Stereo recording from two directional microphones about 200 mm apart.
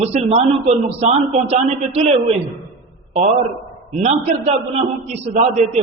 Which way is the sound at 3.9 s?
30° right (ahead or behind).